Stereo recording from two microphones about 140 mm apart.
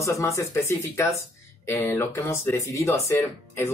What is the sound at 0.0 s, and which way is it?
Speech, 20° left (ahead or behind).